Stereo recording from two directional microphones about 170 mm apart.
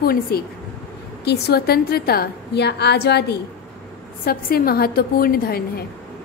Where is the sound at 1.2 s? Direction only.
75° left (ahead or behind).